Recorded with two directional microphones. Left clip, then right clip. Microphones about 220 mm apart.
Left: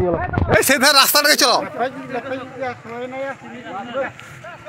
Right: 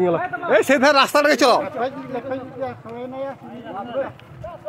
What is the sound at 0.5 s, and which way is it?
Speech, 5° left (ahead or behind).